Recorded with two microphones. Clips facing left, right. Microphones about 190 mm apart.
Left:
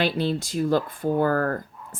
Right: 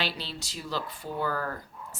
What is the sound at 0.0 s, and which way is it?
Speech, 50° left (ahead or behind).